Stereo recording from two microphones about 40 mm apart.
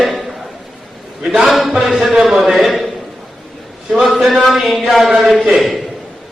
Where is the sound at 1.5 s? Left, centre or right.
Centre.